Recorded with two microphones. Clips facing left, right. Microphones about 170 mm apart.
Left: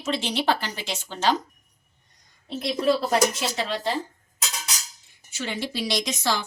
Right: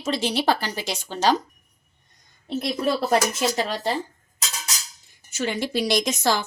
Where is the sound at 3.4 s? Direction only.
45° right (ahead or behind).